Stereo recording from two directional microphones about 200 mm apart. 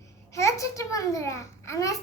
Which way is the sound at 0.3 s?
15° left (ahead or behind).